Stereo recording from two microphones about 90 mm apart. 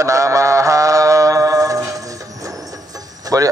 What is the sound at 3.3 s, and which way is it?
Speech, 40° right (ahead or behind).